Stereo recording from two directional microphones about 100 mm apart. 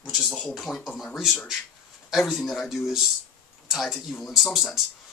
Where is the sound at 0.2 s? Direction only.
Centre (ahead or behind).